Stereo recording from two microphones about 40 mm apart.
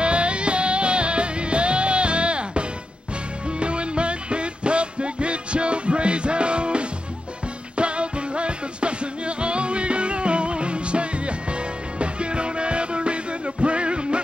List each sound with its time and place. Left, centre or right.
0.0 s music: right